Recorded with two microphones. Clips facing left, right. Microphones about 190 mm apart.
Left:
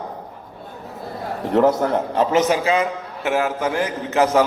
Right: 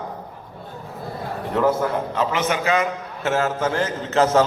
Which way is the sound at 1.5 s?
40° left (ahead or behind).